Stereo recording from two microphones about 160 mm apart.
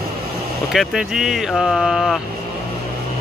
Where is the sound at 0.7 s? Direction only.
5° right (ahead or behind).